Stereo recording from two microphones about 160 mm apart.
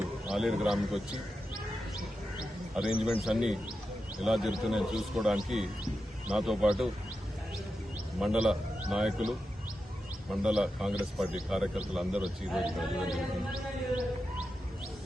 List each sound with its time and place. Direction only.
0.3 s a man's voice: 5° right (ahead or behind)
2.8 s a man's voice: 5° right (ahead or behind)
8.2 s a man's voice: 5° right (ahead or behind)